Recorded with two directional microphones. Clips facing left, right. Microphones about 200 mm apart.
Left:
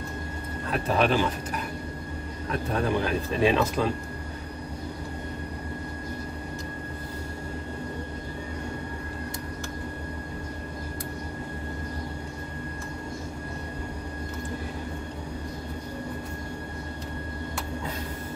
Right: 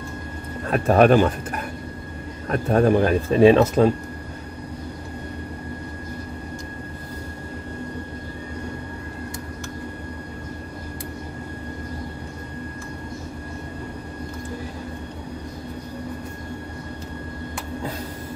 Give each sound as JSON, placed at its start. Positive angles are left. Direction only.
{"t": 0.7, "sound": "speech", "side_deg": -50}
{"t": 2.7, "sound": "speech", "side_deg": -50}